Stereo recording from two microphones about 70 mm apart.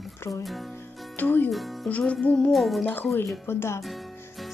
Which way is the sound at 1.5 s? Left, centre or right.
Centre.